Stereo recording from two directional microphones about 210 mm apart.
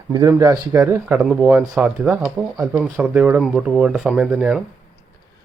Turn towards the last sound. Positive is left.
turn(degrees=-5)  # may be behind; listen again after turning